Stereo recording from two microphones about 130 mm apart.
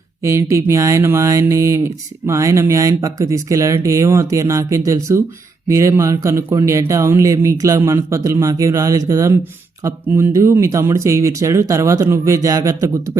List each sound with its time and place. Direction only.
0.2 s speech: 20° right (ahead or behind)